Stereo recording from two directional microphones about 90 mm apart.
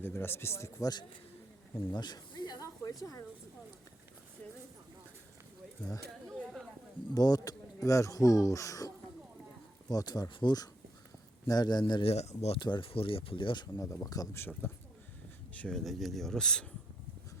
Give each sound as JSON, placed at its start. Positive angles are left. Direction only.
{"t": 0.0, "sound": "speech", "side_deg": 25}
{"t": 1.9, "sound": "snake", "side_deg": 50}
{"t": 3.0, "sound": "speech", "side_deg": 40}
{"t": 6.2, "sound": "speech", "side_deg": 5}
{"t": 7.1, "sound": "speech", "side_deg": 45}
{"t": 9.9, "sound": "a man's voice", "side_deg": 45}
{"t": 13.7, "sound": "speech", "side_deg": 35}
{"t": 14.3, "sound": "speech", "side_deg": 25}
{"t": 15.5, "sound": "speech", "side_deg": 10}